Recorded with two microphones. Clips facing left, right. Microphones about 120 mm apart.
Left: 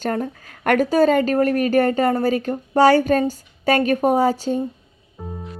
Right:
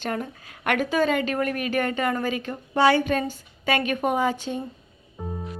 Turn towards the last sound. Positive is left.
turn(degrees=0)  # may be behind; listen again after turning